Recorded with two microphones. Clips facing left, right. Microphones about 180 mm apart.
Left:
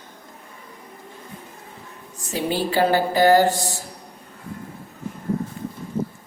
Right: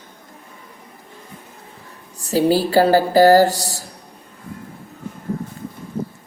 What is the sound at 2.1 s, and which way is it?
A woman's voice, 35° right (ahead or behind).